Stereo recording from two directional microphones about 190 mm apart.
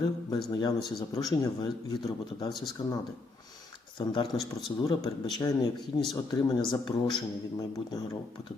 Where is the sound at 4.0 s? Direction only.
20° left (ahead or behind).